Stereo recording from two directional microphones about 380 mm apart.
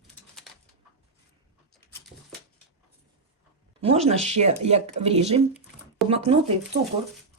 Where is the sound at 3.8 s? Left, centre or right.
Centre.